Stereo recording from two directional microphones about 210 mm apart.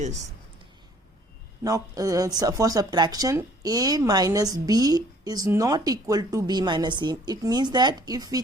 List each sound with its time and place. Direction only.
1.6 s speech: 15° right (ahead or behind)